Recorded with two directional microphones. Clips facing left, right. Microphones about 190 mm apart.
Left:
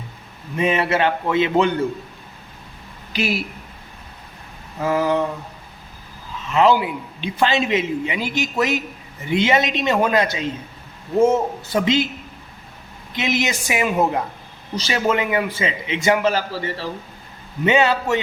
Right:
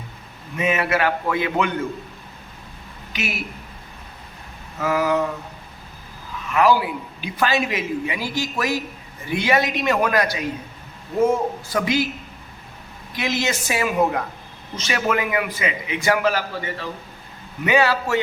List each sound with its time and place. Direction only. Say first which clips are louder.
0.6 s a man's voice: left 2 dB; 30° left (ahead or behind)
3.1 s a woman's voice: left 6 dB; 35° left (ahead or behind)
4.8 s a man's voice: left 1 dB; 30° left (ahead or behind)
6.5 s a man's voice: left 2 dB; 25° left (ahead or behind)
13.1 s a man's voice: left 2 dB; 20° left (ahead or behind)
17.7 s a man's voice: left 2 dB; 20° left (ahead or behind)